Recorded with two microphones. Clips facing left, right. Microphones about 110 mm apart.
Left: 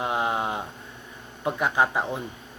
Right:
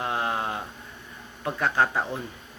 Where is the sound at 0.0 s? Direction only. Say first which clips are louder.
Left 2 dB; 20° left (ahead or behind).